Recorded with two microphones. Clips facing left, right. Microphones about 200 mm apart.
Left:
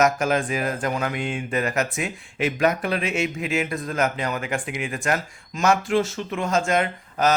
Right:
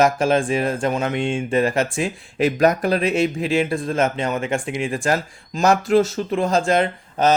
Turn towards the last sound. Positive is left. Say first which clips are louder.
# right 3 dB
turn(degrees=-30)  # may be behind; listen again after turning